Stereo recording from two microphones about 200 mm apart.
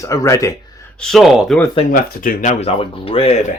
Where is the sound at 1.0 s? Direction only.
Centre (ahead or behind).